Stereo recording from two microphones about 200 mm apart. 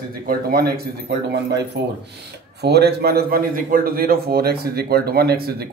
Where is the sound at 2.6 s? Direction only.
55° right (ahead or behind).